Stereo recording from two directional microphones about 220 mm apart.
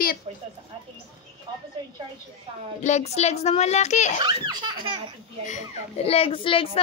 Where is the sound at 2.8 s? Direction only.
30° left (ahead or behind).